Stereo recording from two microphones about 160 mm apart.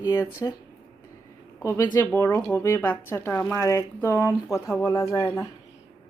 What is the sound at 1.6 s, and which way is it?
Speech, 15° left (ahead or behind).